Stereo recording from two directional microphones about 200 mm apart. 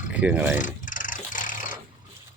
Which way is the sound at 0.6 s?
40° left (ahead or behind).